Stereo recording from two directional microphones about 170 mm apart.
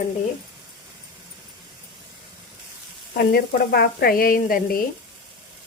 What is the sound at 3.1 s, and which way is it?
Speech, 65° left (ahead or behind).